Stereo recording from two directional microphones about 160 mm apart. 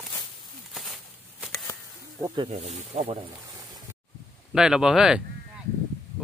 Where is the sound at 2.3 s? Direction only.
40° right (ahead or behind).